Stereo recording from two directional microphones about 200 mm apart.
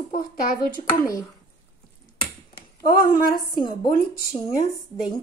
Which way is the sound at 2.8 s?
45° left (ahead or behind).